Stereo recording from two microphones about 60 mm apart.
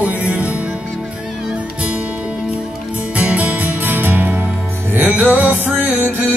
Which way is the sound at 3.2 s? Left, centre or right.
Right.